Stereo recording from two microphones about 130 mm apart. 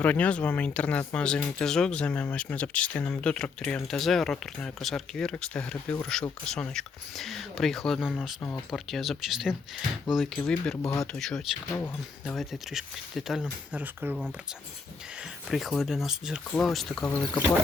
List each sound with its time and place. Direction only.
0.0 s speech: 10° left (ahead or behind)
8.4 s speech: 15° left (ahead or behind)
8.7 s speech: centre (ahead or behind)
11.7 s speech: 15° left (ahead or behind)
12.3 s speech: centre (ahead or behind)
13.7 s speech: 15° right (ahead or behind); by 17.2 s 10° left (ahead or behind)